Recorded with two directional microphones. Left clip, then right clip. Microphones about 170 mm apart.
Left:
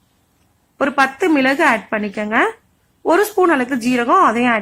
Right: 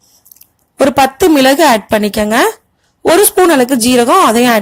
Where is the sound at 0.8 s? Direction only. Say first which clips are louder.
Right 6 dB; 45° right (ahead or behind).